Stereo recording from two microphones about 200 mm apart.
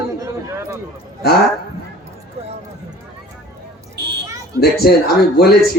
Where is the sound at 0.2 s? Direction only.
15° right (ahead or behind).